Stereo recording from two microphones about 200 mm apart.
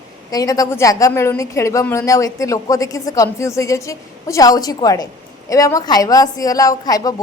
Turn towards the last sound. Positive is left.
turn(degrees=20)  # may be behind; listen again after turning